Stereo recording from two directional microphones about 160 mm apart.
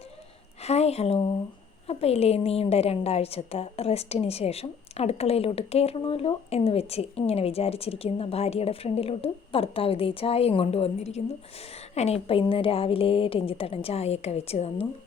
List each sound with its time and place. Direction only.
0.6 s a woman's voice: 40° left (ahead or behind)